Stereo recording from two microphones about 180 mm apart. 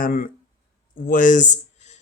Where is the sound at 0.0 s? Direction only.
50° left (ahead or behind).